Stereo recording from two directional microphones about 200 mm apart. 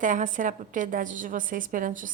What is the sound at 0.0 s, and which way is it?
A woman's voice, 40° right (ahead or behind).